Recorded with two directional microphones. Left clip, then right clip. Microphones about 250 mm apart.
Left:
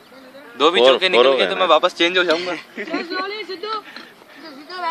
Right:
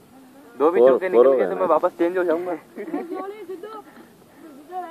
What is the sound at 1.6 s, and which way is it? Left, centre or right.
Speech, left.